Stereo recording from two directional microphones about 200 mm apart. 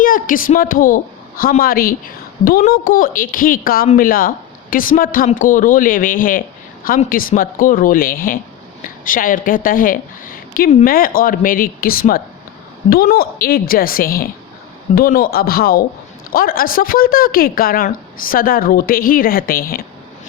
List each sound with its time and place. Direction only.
0.0 s a woman's voice: 45° left (ahead or behind)